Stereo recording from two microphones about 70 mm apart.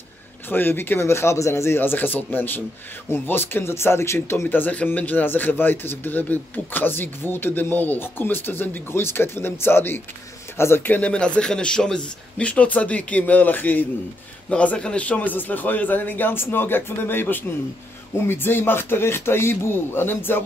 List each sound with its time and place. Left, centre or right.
0.5 s speech: left
4.5 s speech: left